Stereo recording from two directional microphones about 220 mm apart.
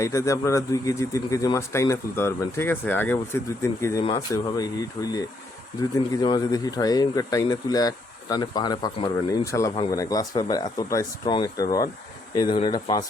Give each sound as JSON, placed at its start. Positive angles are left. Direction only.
{"t": 0.0, "sound": "speech", "side_deg": 15}